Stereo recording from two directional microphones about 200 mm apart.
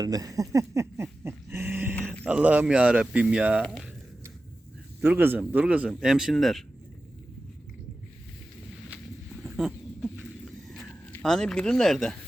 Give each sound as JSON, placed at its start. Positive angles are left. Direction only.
{"t": 0.0, "sound": "speech", "side_deg": -20}
{"t": 1.2, "sound": "dog", "side_deg": -10}
{"t": 2.2, "sound": "speech", "side_deg": -5}
{"t": 4.9, "sound": "speech", "side_deg": -10}
{"t": 9.4, "sound": "a sound", "side_deg": -5}